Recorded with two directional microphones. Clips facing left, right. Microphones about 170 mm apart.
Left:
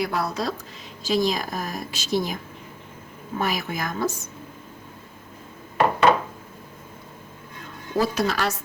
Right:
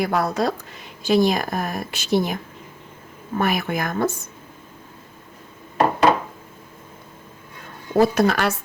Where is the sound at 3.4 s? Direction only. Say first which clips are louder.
Right 4 dB; 55° right (ahead or behind).